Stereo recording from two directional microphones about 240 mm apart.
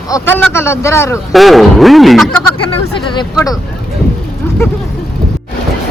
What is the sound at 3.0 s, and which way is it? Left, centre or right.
Speech, centre.